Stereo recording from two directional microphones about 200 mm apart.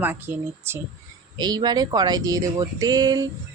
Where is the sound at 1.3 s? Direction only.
20° right (ahead or behind).